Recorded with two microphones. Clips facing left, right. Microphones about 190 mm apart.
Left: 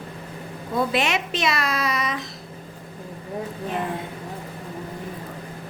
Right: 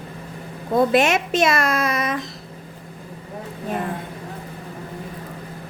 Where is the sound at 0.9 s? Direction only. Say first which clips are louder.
Right 6 dB; 45° right (ahead or behind).